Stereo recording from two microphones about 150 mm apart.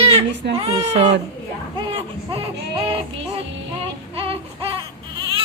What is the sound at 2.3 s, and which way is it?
Speech, 40° right (ahead or behind).